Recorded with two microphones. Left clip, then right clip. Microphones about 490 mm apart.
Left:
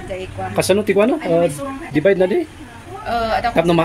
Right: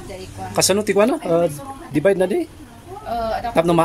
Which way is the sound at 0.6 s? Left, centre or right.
Right.